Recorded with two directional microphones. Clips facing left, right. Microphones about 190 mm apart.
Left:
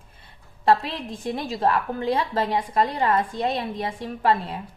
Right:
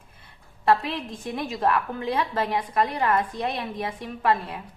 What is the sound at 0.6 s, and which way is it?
A woman's voice, 30° left (ahead or behind).